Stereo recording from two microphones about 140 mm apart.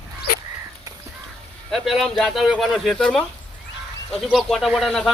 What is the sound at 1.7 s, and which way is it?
Speech, centre (ahead or behind).